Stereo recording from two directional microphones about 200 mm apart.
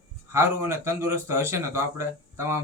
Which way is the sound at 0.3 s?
15° right (ahead or behind).